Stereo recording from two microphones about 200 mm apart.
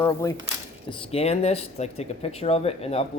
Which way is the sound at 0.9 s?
30° left (ahead or behind).